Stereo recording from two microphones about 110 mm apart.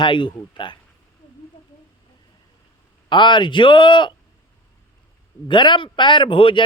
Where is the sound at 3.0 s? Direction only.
45° left (ahead or behind).